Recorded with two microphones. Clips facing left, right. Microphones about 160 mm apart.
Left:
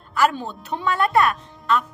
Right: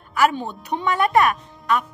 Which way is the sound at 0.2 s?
15° right (ahead or behind).